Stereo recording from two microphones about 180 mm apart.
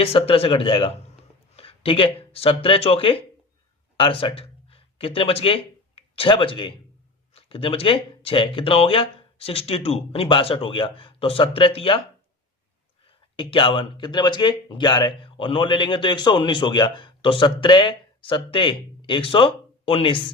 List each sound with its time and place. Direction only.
0.0 s speech: 30° left (ahead or behind)
13.3 s speech: 25° left (ahead or behind)